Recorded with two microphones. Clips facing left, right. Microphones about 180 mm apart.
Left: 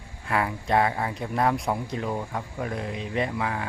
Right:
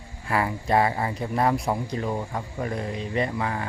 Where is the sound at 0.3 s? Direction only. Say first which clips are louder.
Right 1 dB; centre (ahead or behind).